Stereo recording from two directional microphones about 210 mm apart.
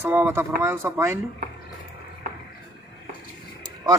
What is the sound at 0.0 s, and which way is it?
Speech, 10° right (ahead or behind).